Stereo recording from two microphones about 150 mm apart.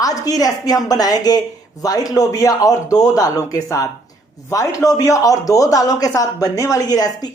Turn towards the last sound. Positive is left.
turn(degrees=25)  # may be behind; listen again after turning